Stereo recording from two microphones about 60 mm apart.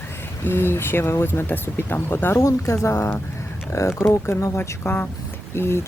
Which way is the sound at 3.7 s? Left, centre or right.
Left.